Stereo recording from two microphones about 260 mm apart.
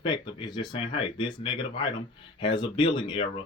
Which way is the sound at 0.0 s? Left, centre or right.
Centre.